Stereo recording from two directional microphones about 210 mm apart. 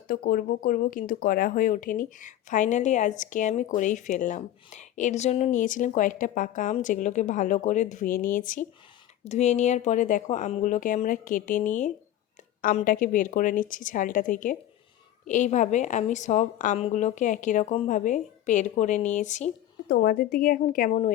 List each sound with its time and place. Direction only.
0.1 s speech: 45° left (ahead or behind)
19.9 s a woman's voice: 45° left (ahead or behind)